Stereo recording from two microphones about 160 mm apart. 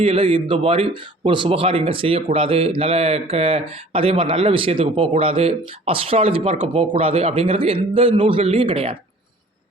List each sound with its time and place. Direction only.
0.0 s a man's voice: 35° right (ahead or behind)